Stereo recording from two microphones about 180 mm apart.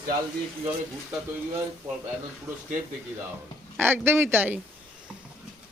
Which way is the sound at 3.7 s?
10° right (ahead or behind).